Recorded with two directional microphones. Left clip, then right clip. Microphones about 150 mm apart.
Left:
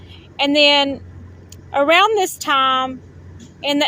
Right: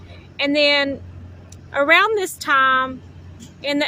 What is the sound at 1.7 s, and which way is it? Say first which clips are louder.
Speech: left 2 dB; 5° left (ahead or behind).